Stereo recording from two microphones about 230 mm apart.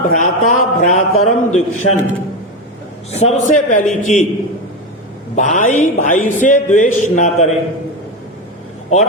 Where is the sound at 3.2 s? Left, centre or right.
Left.